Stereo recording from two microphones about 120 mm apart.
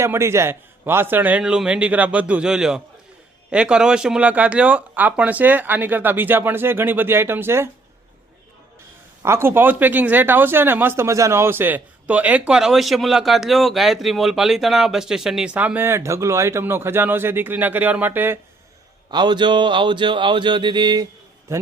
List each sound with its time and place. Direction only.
0.0 s speech: 20° right (ahead or behind)
9.2 s speech: 20° right (ahead or behind)
19.1 s speech: 40° right (ahead or behind)
21.5 s a man's voice: 25° right (ahead or behind)